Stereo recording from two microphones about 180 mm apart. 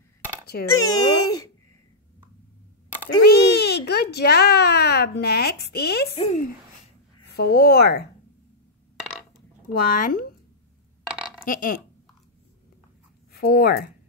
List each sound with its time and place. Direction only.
0.5 s speech: 55° left (ahead or behind)
0.8 s speech: 20° left (ahead or behind)
3.3 s a child's voice: 65° left (ahead or behind)
6.1 s speech: 30° left (ahead or behind)
7.2 s speech: 60° left (ahead or behind)
9.8 s speech: 50° left (ahead or behind)
11.4 s speech: 50° left (ahead or behind)
13.3 s speech: 60° left (ahead or behind)